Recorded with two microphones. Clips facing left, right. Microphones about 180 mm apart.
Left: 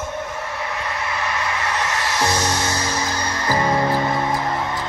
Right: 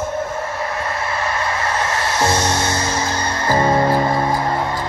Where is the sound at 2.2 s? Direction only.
30° right (ahead or behind).